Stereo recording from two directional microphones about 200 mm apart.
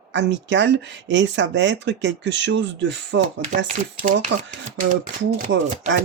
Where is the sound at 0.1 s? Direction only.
65° right (ahead or behind).